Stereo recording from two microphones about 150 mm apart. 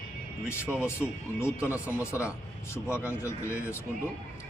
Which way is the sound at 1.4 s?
15° left (ahead or behind).